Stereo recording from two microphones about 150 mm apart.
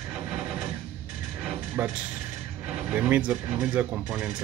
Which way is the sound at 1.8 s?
10° right (ahead or behind).